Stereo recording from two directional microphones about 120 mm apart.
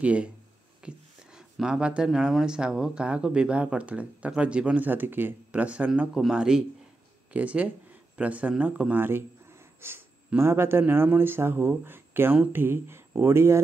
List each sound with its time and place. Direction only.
0.0 s speech: 10° right (ahead or behind)